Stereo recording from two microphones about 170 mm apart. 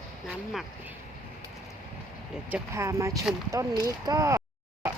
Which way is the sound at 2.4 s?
15° right (ahead or behind).